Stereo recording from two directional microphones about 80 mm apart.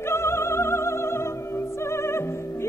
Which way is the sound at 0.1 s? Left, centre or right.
Left.